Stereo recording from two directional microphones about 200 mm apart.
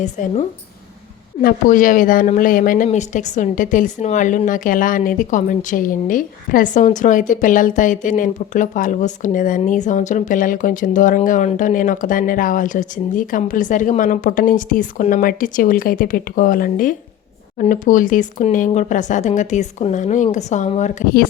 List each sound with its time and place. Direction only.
0.0 s speech: 35° left (ahead or behind)